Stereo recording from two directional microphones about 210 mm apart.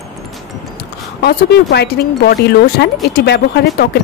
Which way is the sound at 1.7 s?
50° left (ahead or behind).